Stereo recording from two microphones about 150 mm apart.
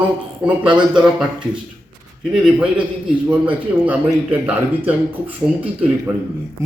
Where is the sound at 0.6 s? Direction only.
30° right (ahead or behind).